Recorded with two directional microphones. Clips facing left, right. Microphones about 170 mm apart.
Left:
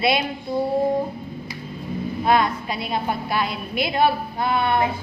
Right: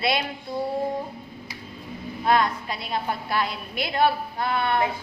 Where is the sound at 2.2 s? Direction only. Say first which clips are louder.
Left 2 dB; 15° left (ahead or behind).